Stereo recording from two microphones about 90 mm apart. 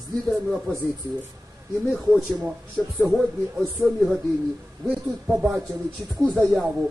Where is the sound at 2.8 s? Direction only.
10° left (ahead or behind).